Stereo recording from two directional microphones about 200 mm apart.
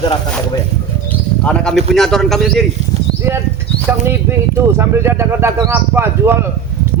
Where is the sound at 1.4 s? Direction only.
5° left (ahead or behind).